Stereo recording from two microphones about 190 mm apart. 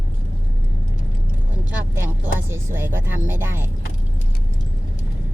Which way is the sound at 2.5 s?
10° right (ahead or behind).